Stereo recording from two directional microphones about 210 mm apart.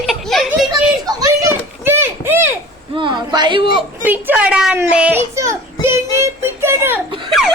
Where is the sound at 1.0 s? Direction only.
15° right (ahead or behind).